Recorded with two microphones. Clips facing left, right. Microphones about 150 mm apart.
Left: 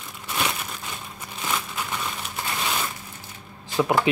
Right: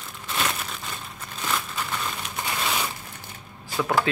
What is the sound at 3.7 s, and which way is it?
Speech, 20° left (ahead or behind).